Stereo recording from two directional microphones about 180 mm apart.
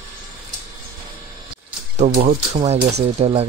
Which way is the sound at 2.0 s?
40° right (ahead or behind).